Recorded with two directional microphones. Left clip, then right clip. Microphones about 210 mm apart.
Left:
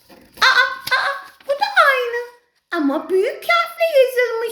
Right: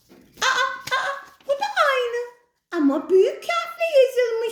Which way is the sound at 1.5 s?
Centre (ahead or behind).